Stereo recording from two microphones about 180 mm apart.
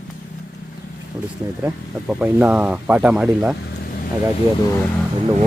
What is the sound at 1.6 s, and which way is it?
Speech, 10° right (ahead or behind).